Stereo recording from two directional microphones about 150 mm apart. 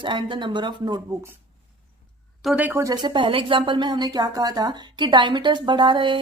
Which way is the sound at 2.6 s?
20° right (ahead or behind).